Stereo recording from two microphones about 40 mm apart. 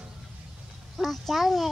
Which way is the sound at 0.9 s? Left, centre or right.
Centre.